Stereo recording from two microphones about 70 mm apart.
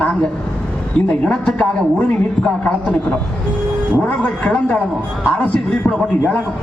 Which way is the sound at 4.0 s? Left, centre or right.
Centre.